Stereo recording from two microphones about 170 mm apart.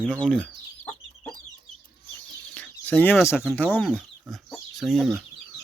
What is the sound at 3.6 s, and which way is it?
Speech, 10° left (ahead or behind).